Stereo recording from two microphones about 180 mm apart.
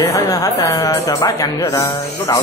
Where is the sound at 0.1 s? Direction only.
20° left (ahead or behind).